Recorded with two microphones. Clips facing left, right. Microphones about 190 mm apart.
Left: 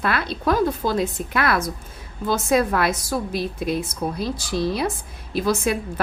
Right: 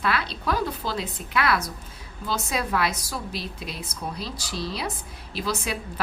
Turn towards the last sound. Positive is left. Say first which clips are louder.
# left 8 dB
turn(degrees=50)  # may be behind; listen again after turning